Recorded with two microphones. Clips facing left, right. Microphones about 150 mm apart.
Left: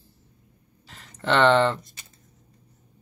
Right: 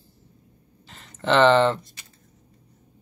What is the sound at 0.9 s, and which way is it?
Speech, centre (ahead or behind).